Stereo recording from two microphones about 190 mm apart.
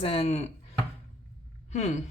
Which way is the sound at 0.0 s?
30° left (ahead or behind).